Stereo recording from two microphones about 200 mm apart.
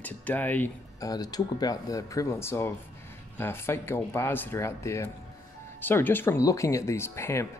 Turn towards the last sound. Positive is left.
turn(degrees=15)  # may be behind; listen again after turning